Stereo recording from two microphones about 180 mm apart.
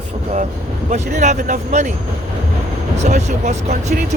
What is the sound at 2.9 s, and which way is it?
Speech, 40° right (ahead or behind).